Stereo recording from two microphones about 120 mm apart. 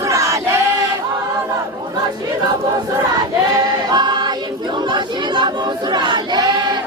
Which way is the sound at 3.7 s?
35° right (ahead or behind).